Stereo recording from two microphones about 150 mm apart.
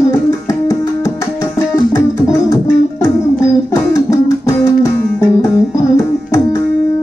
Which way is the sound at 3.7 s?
20° left (ahead or behind).